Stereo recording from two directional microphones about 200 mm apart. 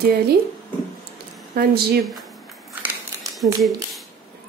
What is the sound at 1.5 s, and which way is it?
Speech, 50° right (ahead or behind).